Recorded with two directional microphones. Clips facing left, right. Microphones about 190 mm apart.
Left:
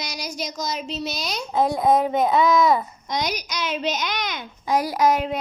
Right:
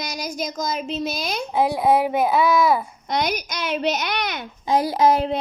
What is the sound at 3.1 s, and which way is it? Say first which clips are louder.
A child's voice: right 3 dB; 55° right (ahead or behind).